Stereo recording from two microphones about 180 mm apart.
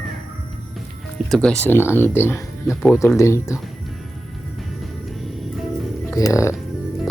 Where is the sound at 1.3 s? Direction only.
5° left (ahead or behind).